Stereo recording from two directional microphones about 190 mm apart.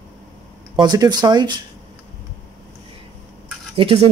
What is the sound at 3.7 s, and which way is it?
Speech, 30° right (ahead or behind).